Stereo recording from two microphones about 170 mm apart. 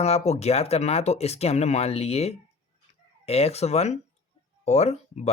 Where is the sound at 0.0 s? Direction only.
40° left (ahead or behind).